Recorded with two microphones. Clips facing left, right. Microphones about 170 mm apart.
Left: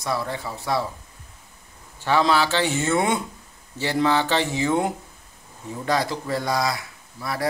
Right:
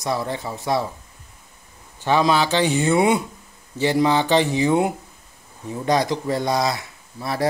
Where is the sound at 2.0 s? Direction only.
15° right (ahead or behind).